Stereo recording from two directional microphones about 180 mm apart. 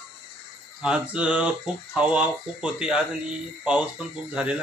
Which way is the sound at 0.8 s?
5° right (ahead or behind).